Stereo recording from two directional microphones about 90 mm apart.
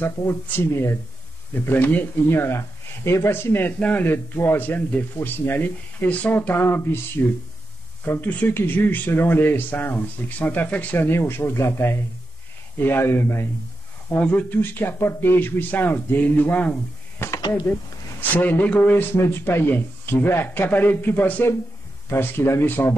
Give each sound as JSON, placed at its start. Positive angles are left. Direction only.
{"t": 0.0, "sound": "speech", "side_deg": 25}
{"t": 8.0, "sound": "speech", "side_deg": 20}
{"t": 17.2, "sound": "a sound", "side_deg": 25}
{"t": 18.3, "sound": "speech", "side_deg": 20}